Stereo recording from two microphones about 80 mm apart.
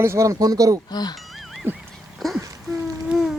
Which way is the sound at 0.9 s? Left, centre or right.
Left.